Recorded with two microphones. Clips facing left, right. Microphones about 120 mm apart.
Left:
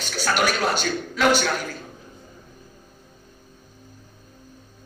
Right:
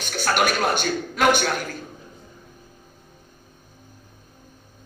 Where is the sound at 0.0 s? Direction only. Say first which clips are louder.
Right 1 dB; 50° right (ahead or behind).